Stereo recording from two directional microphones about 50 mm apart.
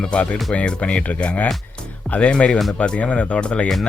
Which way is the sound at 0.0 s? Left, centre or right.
Centre.